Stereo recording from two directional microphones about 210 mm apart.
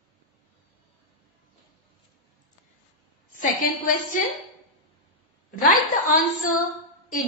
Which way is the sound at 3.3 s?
40° left (ahead or behind).